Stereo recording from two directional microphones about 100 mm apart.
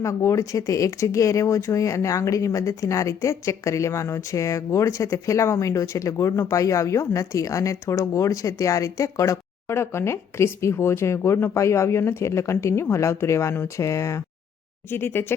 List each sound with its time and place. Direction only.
0.0 s speech: 30° left (ahead or behind)